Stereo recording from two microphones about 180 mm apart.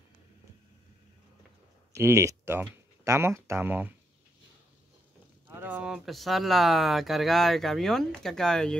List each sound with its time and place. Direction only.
1.9 s speech: 15° right (ahead or behind)
5.5 s speech: 10° right (ahead or behind)